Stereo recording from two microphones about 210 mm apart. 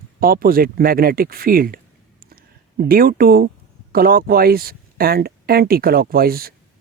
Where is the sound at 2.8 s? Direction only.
45° right (ahead or behind).